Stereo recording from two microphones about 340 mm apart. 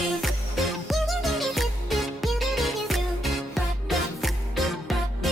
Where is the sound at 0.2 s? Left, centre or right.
Centre.